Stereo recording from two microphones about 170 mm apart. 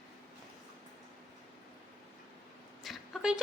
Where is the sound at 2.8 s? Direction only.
Centre (ahead or behind).